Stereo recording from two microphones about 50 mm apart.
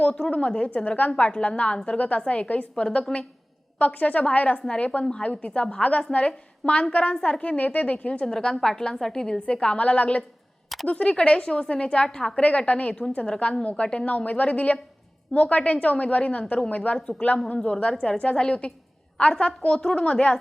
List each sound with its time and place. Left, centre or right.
0.0 s a woman's voice: left
8.3 s a woman's voice: centre
12.4 s a woman's voice: left